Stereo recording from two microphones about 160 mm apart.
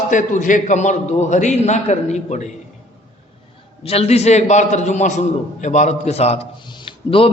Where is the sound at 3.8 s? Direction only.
40° left (ahead or behind).